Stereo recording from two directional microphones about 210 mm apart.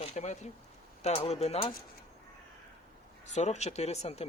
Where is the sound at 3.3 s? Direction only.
35° left (ahead or behind).